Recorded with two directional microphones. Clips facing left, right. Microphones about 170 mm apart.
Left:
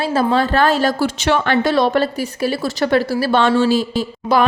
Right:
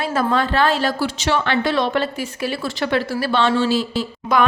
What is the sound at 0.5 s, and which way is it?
A woman's voice, 45° left (ahead or behind).